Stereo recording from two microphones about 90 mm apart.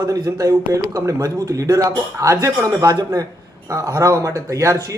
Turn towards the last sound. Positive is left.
turn(degrees=-40)  # may be behind; listen again after turning